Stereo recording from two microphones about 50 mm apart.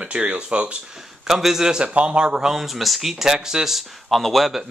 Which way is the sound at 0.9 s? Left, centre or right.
Centre.